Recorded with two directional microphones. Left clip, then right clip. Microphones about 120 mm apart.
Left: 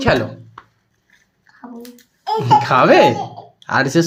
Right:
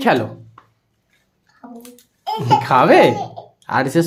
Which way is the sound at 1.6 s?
20° left (ahead or behind).